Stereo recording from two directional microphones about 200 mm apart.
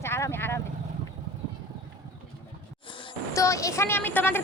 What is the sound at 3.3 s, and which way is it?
Speech, 15° left (ahead or behind).